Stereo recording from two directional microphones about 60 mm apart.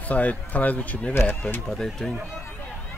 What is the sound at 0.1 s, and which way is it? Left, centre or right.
Speech, left.